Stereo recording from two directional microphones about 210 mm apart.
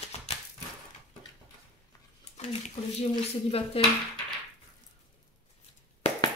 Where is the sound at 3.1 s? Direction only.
25° left (ahead or behind).